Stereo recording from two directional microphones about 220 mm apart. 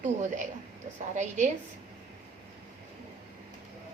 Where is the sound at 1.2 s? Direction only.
35° right (ahead or behind).